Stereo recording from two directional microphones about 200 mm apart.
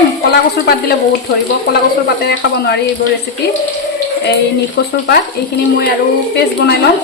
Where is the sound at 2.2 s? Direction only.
55° left (ahead or behind).